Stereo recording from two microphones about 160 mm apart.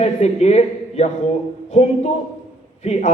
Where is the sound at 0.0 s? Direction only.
45° left (ahead or behind).